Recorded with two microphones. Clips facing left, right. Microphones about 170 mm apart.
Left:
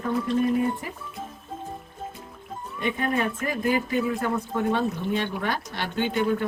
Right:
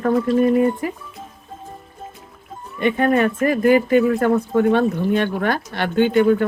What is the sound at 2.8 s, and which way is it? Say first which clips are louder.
Speech: right 9 dB; 65° right (ahead or behind).